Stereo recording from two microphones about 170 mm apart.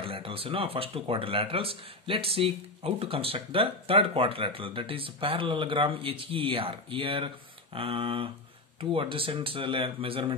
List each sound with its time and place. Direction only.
0.0 s speech: 30° right (ahead or behind)